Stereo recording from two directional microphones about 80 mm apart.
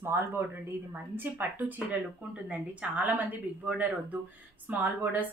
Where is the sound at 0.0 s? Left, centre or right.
Right.